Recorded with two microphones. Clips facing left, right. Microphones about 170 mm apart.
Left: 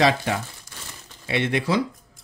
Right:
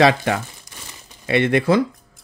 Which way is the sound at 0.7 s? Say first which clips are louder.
Right 1 dB; 15° right (ahead or behind).